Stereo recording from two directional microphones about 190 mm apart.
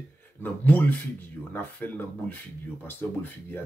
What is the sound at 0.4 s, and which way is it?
Speech, 10° left (ahead or behind).